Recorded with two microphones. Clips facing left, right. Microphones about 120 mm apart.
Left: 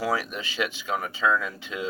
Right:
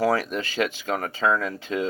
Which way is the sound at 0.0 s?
45° right (ahead or behind).